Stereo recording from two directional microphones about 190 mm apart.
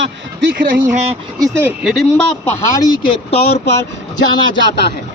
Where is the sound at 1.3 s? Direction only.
20° right (ahead or behind).